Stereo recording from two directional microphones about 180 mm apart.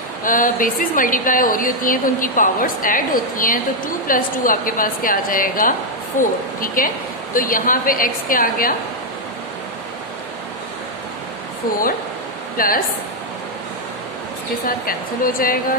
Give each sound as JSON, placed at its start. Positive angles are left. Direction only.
{"t": 0.2, "sound": "a woman's voice", "side_deg": 50}
{"t": 12.5, "sound": "speech", "side_deg": 50}
{"t": 14.9, "sound": "a woman's voice", "side_deg": 50}